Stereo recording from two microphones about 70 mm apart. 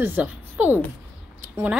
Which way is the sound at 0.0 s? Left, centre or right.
Right.